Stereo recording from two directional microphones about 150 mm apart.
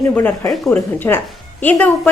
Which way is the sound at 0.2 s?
15° left (ahead or behind).